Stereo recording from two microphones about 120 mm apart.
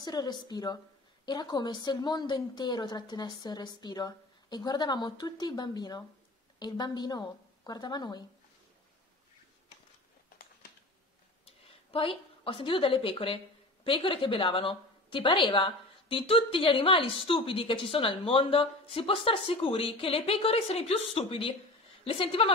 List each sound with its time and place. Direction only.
0.0 s a woman's voice: 35° left (ahead or behind)
11.4 s a woman's voice: 50° left (ahead or behind)